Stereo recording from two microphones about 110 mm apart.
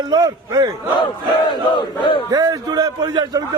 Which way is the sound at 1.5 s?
50° left (ahead or behind).